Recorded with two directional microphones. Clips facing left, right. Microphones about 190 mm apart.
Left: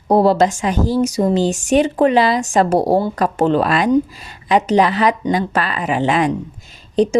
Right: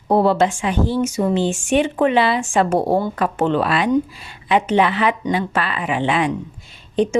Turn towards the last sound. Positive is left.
turn(degrees=35)  # may be behind; listen again after turning